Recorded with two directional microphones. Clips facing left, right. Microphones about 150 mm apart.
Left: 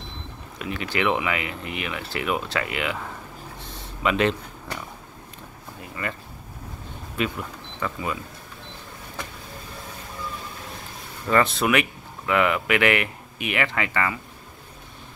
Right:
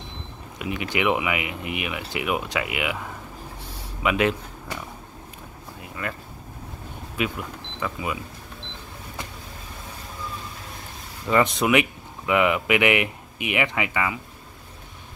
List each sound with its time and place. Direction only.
0.6 s speech: 15° right (ahead or behind)
3.6 s a sound: 10° right (ahead or behind)
6.0 s speech: 5° left (ahead or behind)
7.2 s speech: 10° right (ahead or behind)
11.2 s speech: 15° right (ahead or behind)